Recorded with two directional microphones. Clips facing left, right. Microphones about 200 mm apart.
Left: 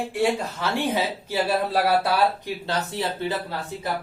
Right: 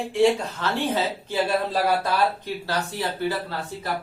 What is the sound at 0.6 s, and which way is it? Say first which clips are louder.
A man's voice: even; 10° left (ahead or behind).